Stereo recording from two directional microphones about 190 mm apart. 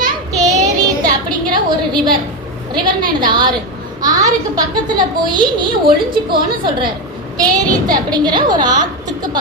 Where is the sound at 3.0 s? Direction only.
25° right (ahead or behind).